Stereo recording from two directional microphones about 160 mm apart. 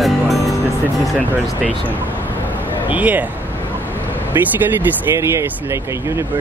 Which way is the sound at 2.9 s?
10° right (ahead or behind).